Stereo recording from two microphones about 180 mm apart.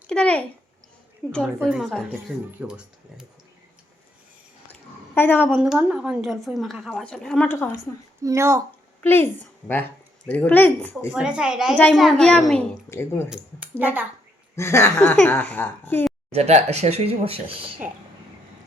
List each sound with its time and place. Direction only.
0.1 s a child's voice: 5° left (ahead or behind)
1.6 s a woman's voice: centre (ahead or behind)
4.7 s a sound: 10° left (ahead or behind)
5.5 s a woman's voice: 5° right (ahead or behind)
8.2 s speech: 15° right (ahead or behind)
9.0 s a woman's voice: 10° left (ahead or behind)
11.1 s a woman's voice: 5° right (ahead or behind)
11.8 s a woman's voice: 10° left (ahead or behind)
12.9 s a woman's voice: 15° left (ahead or behind)
13.3 s speech: 10° right (ahead or behind)
14.5 s a woman's voice: 15° left (ahead or behind)
16.3 s speech: 35° right (ahead or behind)